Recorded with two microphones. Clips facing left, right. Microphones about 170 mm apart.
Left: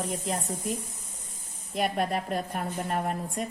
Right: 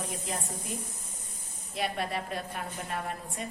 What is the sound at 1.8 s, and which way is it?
A woman's voice, 50° left (ahead or behind).